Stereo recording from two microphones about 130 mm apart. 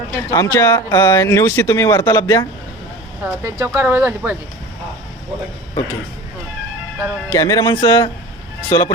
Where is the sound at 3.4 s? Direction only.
20° right (ahead or behind).